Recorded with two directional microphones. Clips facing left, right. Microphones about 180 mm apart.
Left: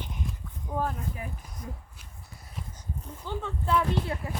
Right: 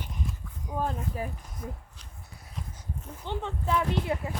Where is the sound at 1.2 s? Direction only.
35° right (ahead or behind).